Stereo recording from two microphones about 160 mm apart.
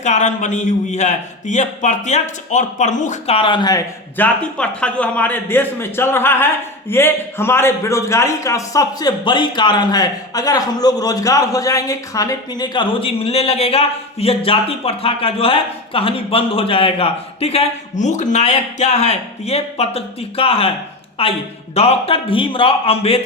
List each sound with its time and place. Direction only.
0.0 s a man's voice: 45° left (ahead or behind); by 3.8 s 25° left (ahead or behind)
4.2 s a man's voice: 5° left (ahead or behind); by 23.2 s 35° left (ahead or behind)